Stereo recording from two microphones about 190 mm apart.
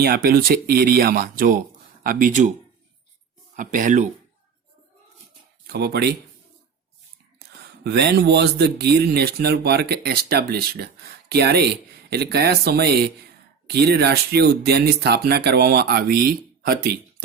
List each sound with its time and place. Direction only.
0.0 s speech: 55° right (ahead or behind)
3.5 s speech: 45° right (ahead or behind)
5.6 s speech: 60° right (ahead or behind)
7.9 s speech: 60° right (ahead or behind)